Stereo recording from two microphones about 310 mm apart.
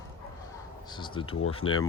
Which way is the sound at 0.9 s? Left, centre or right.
Centre.